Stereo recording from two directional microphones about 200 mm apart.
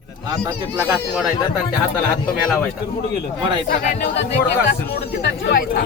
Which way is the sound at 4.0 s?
60° left (ahead or behind).